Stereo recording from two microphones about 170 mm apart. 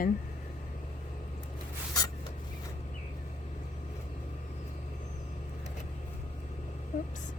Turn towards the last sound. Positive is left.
turn(degrees=45)  # may be behind; listen again after turning